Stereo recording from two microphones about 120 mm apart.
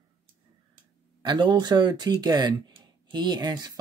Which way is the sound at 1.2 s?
40° right (ahead or behind).